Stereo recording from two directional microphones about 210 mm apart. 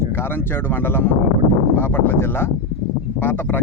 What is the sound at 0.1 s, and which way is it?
Speech, 10° left (ahead or behind).